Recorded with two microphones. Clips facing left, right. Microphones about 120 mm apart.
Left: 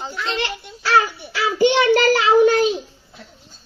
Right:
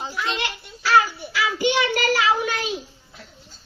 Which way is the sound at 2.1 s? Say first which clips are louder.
Left 8 dB; 40° left (ahead or behind).